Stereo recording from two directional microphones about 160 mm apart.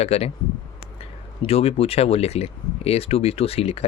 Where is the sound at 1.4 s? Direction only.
40° left (ahead or behind).